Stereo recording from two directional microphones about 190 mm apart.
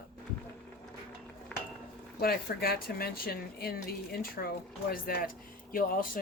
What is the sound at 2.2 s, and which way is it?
Speech, 55° left (ahead or behind).